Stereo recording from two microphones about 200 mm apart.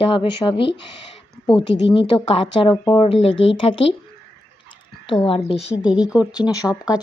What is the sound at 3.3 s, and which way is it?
Speech, 70° left (ahead or behind).